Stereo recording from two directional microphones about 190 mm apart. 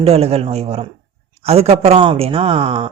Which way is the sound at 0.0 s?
30° right (ahead or behind).